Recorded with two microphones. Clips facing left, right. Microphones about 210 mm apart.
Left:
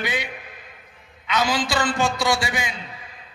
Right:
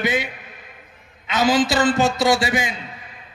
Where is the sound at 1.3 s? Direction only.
25° right (ahead or behind).